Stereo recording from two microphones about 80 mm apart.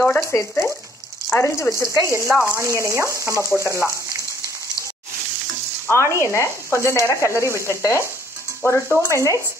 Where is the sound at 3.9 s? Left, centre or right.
Right.